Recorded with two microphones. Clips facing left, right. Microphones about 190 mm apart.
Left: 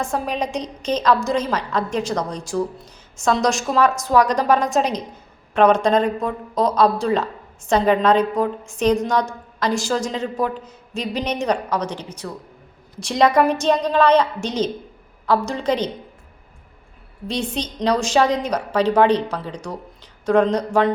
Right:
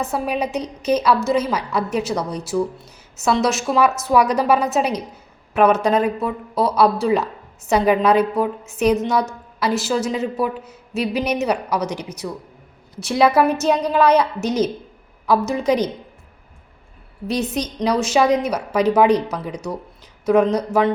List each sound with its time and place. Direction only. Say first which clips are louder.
0.0 s a woman's voice: right 1 dB; 5° right (ahead or behind)
17.2 s a woman's voice: right 3 dB; 10° right (ahead or behind)